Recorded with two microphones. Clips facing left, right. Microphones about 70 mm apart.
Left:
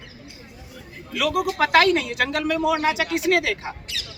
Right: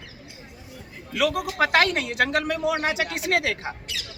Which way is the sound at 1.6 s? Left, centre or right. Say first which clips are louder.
Left 3 dB; right.